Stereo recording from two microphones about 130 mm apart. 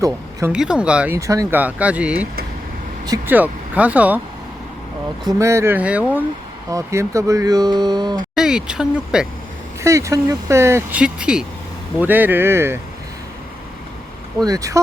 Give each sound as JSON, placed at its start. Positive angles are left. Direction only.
{"t": 0.0, "sound": "a sound", "side_deg": -25}
{"t": 0.5, "sound": "speech", "side_deg": -5}
{"t": 1.1, "sound": "speech", "side_deg": -20}
{"t": 1.5, "sound": "speech", "side_deg": -10}
{"t": 3.2, "sound": "speech", "side_deg": -10}
{"t": 5.4, "sound": "speech", "side_deg": -20}
{"t": 6.7, "sound": "speech", "side_deg": -25}
{"t": 8.4, "sound": "speech", "side_deg": -5}
{"t": 9.8, "sound": "speech", "side_deg": -25}
{"t": 14.4, "sound": "speech", "side_deg": -25}